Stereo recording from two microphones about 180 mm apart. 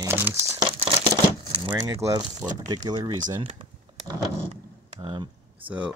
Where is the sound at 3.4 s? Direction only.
35° right (ahead or behind).